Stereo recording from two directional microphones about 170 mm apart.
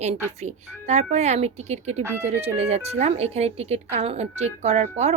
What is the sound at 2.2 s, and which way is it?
A woman's voice, 35° right (ahead or behind).